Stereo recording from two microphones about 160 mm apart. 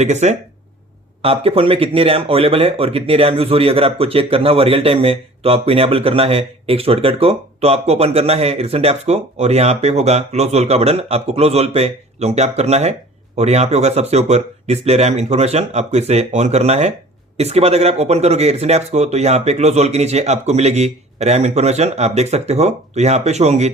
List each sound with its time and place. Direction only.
0.0 s speech: 45° right (ahead or behind)